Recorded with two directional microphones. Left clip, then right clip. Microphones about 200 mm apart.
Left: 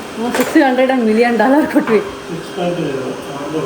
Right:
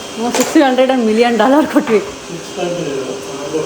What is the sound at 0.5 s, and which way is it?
Speech, 25° right (ahead or behind).